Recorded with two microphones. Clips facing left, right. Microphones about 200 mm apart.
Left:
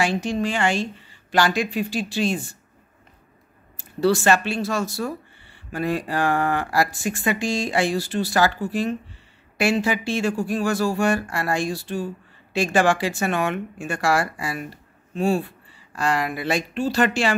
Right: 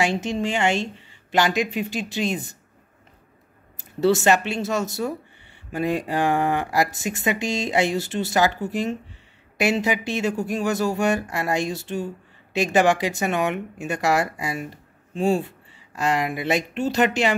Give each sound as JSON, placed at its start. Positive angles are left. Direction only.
{"t": 0.0, "sound": "speech", "side_deg": -20}
{"t": 3.7, "sound": "speech", "side_deg": -20}